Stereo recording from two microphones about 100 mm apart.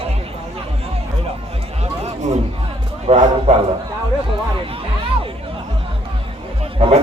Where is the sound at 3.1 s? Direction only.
90° right.